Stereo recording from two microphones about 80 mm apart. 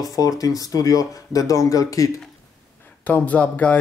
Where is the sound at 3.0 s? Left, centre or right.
Centre.